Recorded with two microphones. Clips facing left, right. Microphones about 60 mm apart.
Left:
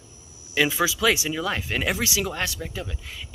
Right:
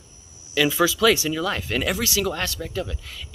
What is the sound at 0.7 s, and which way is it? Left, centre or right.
Speech, centre.